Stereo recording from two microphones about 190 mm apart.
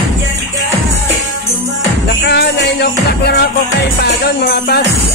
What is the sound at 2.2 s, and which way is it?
Music, 60° left (ahead or behind).